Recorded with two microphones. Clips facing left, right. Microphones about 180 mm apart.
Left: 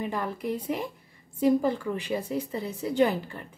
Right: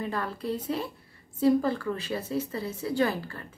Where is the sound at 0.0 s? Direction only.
15° left (ahead or behind).